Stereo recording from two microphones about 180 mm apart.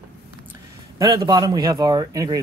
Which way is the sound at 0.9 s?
20° right (ahead or behind).